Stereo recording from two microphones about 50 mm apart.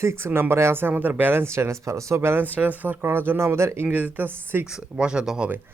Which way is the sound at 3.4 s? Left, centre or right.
Right.